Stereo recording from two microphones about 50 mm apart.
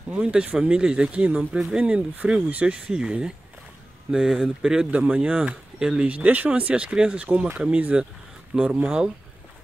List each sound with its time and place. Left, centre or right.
0.2 s speech: right
4.9 s speech: right
6.0 s speech: right
6.7 s speech: right